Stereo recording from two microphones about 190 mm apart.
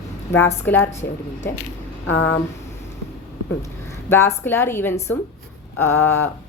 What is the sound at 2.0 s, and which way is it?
Speech, 80° left.